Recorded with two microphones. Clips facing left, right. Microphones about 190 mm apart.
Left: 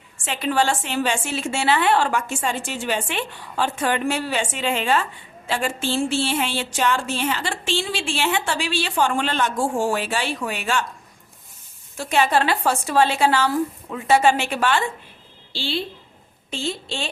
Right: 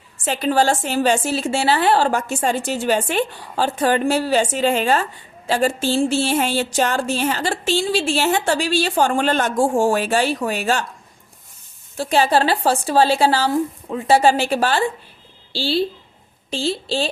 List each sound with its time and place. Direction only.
0.3 s a woman's voice: 40° right (ahead or behind)
11.9 s a woman's voice: 35° right (ahead or behind)